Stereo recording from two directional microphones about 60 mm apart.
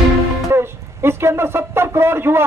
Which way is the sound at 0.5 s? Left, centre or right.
Right.